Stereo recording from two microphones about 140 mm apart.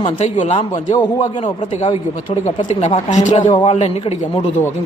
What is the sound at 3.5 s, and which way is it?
Speech, 40° left (ahead or behind).